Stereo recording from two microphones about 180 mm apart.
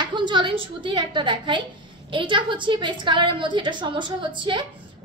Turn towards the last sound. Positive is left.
turn(degrees=-25)  # may be behind; listen again after turning